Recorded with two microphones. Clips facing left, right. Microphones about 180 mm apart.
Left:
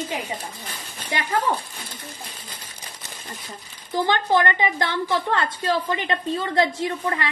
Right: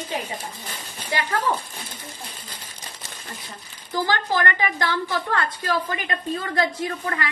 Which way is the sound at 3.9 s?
25° left (ahead or behind).